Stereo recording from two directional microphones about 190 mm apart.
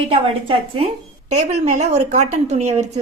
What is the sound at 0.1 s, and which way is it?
A woman's voice, 30° right (ahead or behind).